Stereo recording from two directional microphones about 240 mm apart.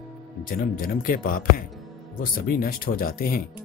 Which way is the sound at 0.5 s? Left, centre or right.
Left.